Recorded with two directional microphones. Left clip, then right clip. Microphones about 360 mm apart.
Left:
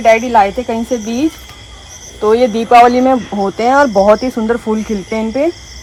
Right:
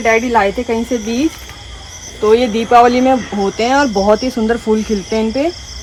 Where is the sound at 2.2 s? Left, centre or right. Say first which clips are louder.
Left 1 dB; centre.